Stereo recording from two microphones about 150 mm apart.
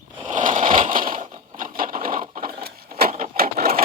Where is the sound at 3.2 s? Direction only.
80° right.